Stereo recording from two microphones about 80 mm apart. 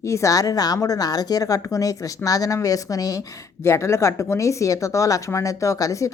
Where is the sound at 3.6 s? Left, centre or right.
Left.